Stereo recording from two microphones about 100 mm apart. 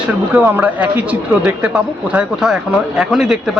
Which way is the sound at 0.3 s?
15° right (ahead or behind).